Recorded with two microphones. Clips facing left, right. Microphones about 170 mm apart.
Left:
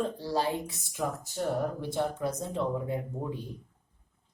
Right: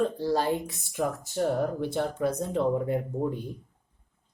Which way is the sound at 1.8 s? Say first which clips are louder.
Right 3 dB; 60° right (ahead or behind).